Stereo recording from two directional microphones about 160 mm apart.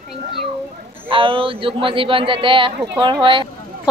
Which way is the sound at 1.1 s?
35° right (ahead or behind).